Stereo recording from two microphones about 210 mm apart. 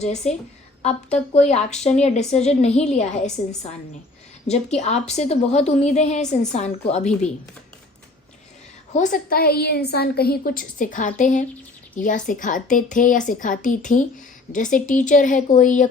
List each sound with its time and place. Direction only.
0.0 s a woman's voice: 30° left (ahead or behind)
8.9 s a woman's voice: 35° left (ahead or behind)